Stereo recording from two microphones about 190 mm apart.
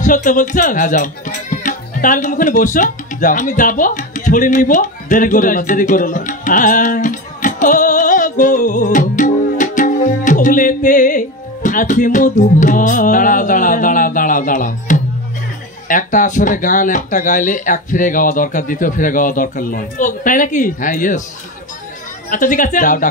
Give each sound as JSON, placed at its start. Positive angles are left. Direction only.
{"t": 0.0, "sound": "speech", "side_deg": 45}
{"t": 22.3, "sound": "speech", "side_deg": 45}